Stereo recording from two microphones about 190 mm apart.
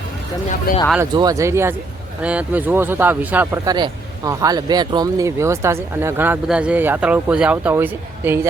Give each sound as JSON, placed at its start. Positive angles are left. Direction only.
{"t": 1.1, "sound": "speech", "side_deg": -20}